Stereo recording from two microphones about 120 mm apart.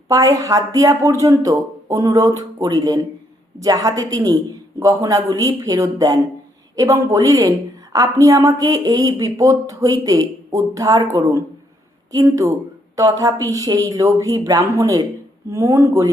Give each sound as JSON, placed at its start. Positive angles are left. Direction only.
{"t": 0.1, "sound": "a woman's voice", "side_deg": -30}